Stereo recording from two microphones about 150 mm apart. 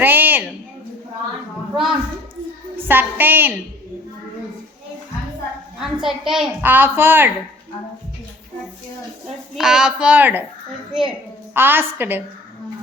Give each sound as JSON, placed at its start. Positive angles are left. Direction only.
{"t": 0.0, "sound": "a woman's voice", "side_deg": -10}
{"t": 1.7, "sound": "a woman's voice", "side_deg": 0}
{"t": 2.7, "sound": "a woman's voice", "side_deg": -15}
{"t": 5.8, "sound": "a woman's voice", "side_deg": 0}
{"t": 9.6, "sound": "a woman's voice", "side_deg": -5}
{"t": 11.5, "sound": "a woman's voice", "side_deg": -15}